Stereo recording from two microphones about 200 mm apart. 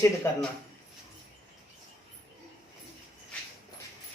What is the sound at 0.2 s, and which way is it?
Speech, 10° left (ahead or behind).